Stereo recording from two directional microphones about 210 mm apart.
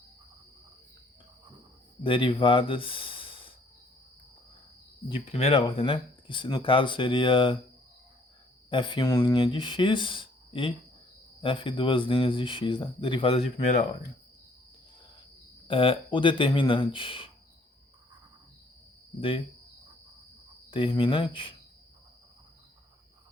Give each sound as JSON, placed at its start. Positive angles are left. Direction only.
{"t": 2.0, "sound": "speech", "side_deg": 25}
{"t": 5.0, "sound": "speech", "side_deg": 25}
{"t": 8.7, "sound": "speech", "side_deg": 25}
{"t": 15.6, "sound": "speech", "side_deg": 25}
{"t": 20.7, "sound": "speech", "side_deg": 25}